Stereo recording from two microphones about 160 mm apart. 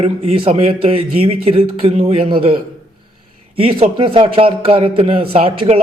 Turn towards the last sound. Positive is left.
turn(degrees=-35)  # may be behind; listen again after turning